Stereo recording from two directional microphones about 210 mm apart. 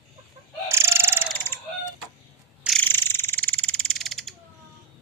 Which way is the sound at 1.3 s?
10° left (ahead or behind).